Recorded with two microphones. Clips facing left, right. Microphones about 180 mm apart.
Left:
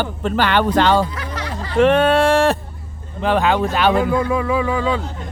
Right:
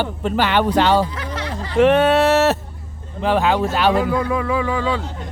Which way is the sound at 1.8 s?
10° right (ahead or behind).